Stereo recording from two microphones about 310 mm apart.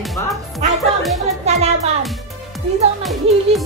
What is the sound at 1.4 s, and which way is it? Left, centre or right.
Music, centre.